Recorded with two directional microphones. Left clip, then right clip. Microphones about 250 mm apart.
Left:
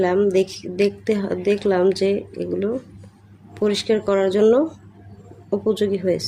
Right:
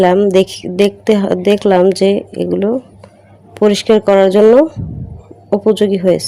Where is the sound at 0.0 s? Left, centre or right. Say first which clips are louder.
Right 8 dB; right.